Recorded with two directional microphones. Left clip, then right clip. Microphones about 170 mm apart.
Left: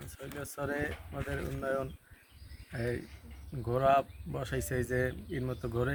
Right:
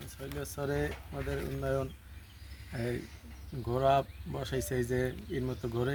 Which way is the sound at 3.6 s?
25° left (ahead or behind).